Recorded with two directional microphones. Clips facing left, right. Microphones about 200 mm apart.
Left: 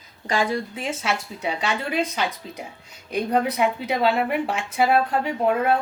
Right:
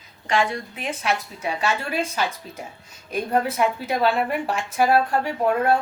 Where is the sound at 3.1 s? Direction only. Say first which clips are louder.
Left 1 dB; 20° left (ahead or behind).